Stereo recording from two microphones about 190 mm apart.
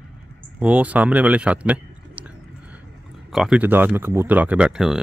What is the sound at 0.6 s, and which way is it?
Speech, 5° right (ahead or behind).